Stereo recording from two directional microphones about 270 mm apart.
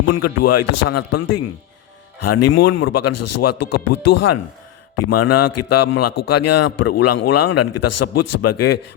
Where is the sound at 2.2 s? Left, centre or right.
Left.